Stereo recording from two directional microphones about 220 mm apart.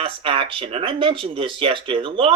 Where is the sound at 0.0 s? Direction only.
25° right (ahead or behind).